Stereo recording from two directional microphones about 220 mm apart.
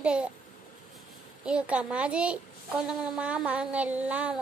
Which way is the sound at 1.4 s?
5° right (ahead or behind).